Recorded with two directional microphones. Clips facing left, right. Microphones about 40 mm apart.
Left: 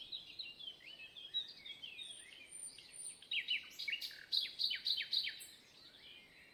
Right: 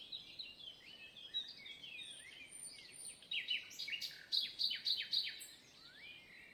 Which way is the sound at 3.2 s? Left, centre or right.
Centre.